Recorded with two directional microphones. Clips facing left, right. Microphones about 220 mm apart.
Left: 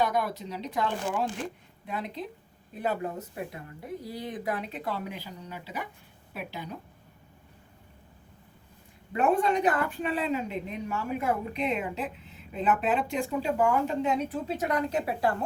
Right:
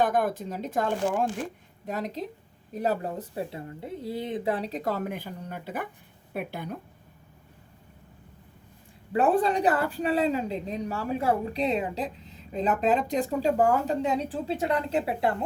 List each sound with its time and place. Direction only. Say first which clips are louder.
0.0 s a woman's voice: right 3 dB; 50° right (ahead or behind)
9.1 s a woman's voice: right 2 dB; 35° right (ahead or behind)